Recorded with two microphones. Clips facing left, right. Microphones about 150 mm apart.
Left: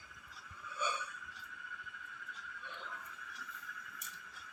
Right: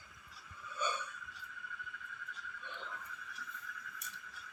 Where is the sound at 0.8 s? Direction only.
10° left (ahead or behind).